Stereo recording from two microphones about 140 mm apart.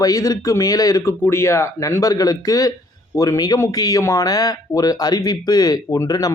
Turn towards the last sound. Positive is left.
turn(degrees=25)  # may be behind; listen again after turning